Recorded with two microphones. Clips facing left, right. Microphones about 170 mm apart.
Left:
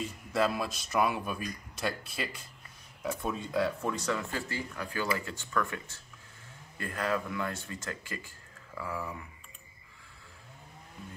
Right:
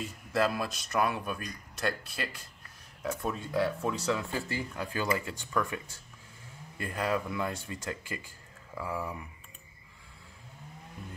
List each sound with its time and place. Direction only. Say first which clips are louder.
0.0 s speech: even; centre (ahead or behind)
4.3 s speech: right 2 dB; 20° right (ahead or behind)